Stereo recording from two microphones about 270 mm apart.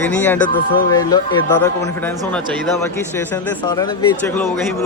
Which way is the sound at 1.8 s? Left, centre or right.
Centre.